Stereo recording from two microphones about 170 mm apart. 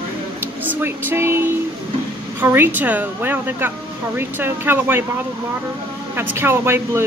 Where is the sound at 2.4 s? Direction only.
10° right (ahead or behind).